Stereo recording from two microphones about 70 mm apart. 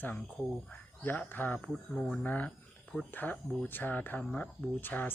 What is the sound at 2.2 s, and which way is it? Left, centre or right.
Speech, left.